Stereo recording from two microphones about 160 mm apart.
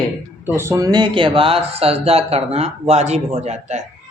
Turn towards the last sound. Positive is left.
turn(degrees=-45)  # may be behind; listen again after turning